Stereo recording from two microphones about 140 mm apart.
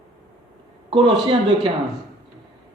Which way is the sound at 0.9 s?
35° right (ahead or behind).